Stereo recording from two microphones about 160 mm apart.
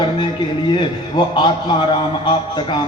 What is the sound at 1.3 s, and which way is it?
Speech, 30° left (ahead or behind).